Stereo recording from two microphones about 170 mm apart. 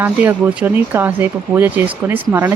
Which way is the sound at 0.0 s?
10° right (ahead or behind).